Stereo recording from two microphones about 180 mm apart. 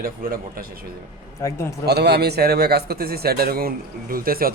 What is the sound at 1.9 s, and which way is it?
Speech, 65° right (ahead or behind).